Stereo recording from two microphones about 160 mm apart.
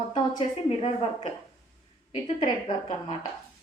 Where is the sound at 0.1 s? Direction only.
35° left (ahead or behind).